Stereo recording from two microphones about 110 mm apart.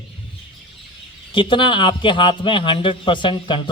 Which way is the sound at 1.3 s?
50° left (ahead or behind).